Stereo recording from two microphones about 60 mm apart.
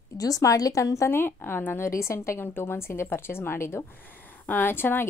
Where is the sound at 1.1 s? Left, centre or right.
Left.